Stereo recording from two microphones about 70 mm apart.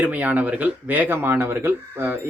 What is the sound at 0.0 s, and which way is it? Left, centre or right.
Speech, right.